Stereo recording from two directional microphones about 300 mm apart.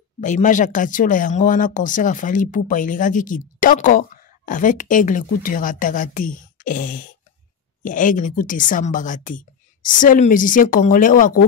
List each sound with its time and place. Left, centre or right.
0.2 s speech: left